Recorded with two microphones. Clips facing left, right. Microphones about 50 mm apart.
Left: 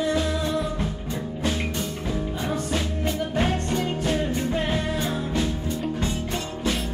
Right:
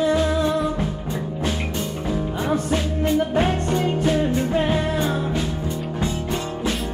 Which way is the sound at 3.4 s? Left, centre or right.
Centre.